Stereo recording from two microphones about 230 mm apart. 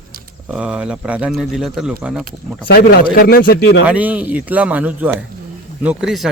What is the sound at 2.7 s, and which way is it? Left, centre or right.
A man's voice, left.